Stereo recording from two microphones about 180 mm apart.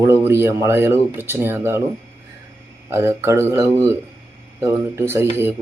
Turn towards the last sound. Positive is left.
turn(degrees=-15)  # may be behind; listen again after turning